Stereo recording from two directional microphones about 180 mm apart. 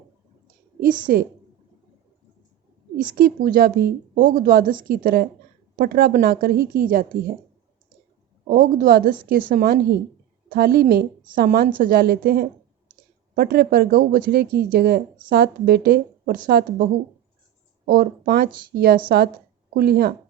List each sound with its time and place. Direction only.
1.0 s speech: 55° right (ahead or behind)
3.0 s speech: 55° right (ahead or behind)
8.4 s a woman's voice: 50° right (ahead or behind)